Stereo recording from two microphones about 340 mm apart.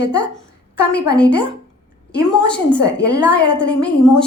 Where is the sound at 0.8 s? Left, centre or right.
Left.